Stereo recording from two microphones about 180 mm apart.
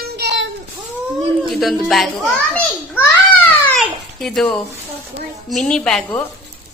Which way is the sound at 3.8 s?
Centre (ahead or behind).